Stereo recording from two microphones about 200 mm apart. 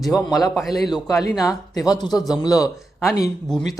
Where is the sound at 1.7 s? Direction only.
20° left (ahead or behind).